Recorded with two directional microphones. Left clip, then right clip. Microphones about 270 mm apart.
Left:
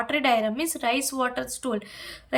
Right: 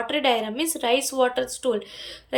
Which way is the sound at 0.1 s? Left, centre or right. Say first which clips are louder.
Even; centre.